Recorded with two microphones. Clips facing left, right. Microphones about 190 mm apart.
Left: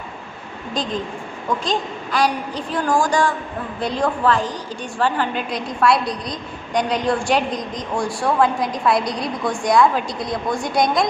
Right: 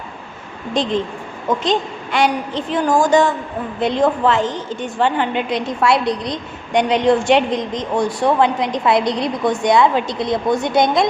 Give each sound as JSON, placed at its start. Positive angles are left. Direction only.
{"t": 1.5, "sound": "a woman's voice", "side_deg": -25}